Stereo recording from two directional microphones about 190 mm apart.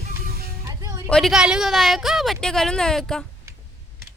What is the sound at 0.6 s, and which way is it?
Music, 15° right (ahead or behind).